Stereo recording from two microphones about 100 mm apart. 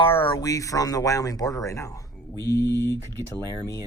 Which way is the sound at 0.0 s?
60° left (ahead or behind).